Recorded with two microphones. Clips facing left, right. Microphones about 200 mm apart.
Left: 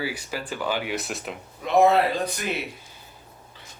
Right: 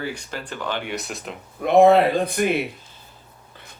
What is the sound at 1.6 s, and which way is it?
Speech, 55° right (ahead or behind).